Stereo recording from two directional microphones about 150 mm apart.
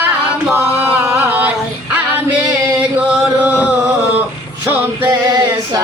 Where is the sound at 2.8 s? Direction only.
10° right (ahead or behind).